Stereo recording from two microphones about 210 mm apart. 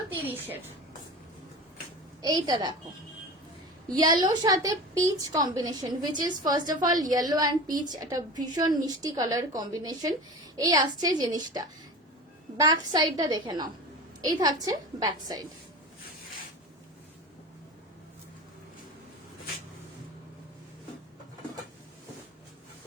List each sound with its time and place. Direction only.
0.3 s a woman's voice: 10° right (ahead or behind)
2.2 s a woman's voice: 20° right (ahead or behind)
3.8 s a woman's voice: 20° right (ahead or behind)